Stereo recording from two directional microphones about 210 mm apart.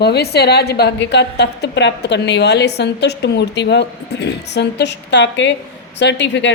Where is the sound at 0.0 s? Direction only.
50° left (ahead or behind).